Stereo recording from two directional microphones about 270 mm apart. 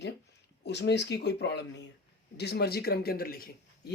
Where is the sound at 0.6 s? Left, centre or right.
Left.